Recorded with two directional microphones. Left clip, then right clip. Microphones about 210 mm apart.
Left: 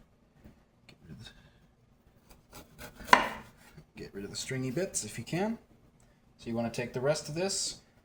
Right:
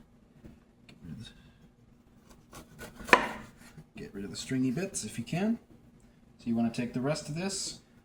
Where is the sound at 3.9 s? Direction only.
35° left (ahead or behind).